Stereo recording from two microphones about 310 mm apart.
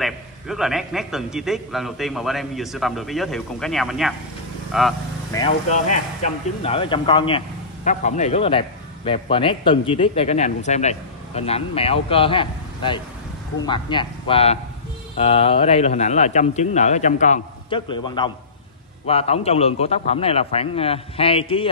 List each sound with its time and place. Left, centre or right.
0.0 s a man's voice: centre
5.3 s speech: centre